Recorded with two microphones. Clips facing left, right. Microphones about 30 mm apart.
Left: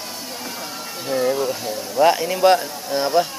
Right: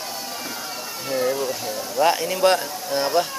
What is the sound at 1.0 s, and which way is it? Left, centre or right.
A man's voice, centre.